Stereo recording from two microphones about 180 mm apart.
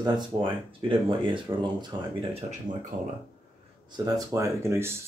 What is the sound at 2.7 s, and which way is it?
Speech, 45° right (ahead or behind).